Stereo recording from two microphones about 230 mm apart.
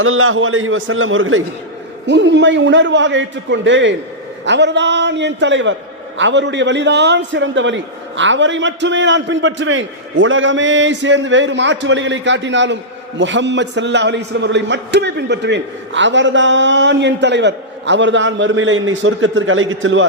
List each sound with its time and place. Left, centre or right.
0.0 s a man's voice: right